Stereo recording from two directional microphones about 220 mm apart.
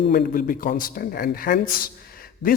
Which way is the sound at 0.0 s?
45° left (ahead or behind).